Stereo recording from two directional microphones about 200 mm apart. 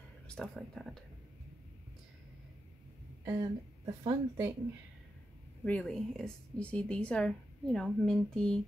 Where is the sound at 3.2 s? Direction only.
15° right (ahead or behind).